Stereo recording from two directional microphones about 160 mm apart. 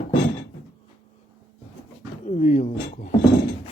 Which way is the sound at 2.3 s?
45° left (ahead or behind).